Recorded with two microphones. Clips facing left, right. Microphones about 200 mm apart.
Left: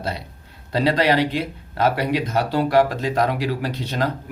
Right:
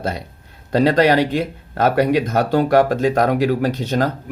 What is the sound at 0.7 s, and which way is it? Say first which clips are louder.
Speech: right 5 dB; 45° right (ahead or behind).